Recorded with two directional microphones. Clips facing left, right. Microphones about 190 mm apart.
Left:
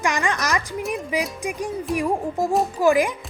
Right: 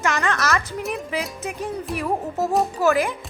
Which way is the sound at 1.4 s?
15° left (ahead or behind).